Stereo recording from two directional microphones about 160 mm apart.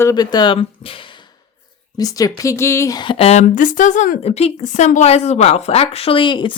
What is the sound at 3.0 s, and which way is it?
Speech, 35° left (ahead or behind).